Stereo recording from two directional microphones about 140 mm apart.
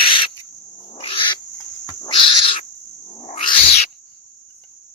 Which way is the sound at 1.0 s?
40° left (ahead or behind).